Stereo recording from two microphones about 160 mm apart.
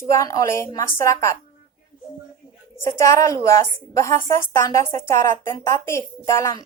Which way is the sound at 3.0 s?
20° left (ahead or behind).